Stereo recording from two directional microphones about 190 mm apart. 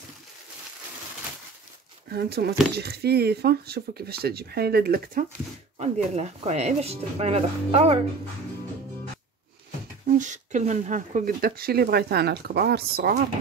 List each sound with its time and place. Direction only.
2.0 s speech: 55° right (ahead or behind)
5.8 s speech: 35° right (ahead or behind)
10.0 s speech: 40° right (ahead or behind); by 13.2 s 55° right (ahead or behind)